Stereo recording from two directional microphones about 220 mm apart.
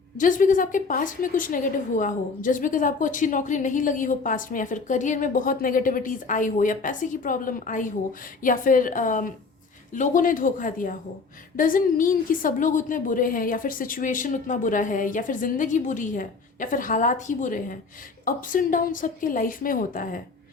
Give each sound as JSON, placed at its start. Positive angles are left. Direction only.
{"t": 0.2, "sound": "a woman's voice", "side_deg": 35}